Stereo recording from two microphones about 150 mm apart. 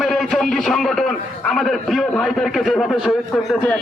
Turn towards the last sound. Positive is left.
turn(degrees=0)  # may be behind; listen again after turning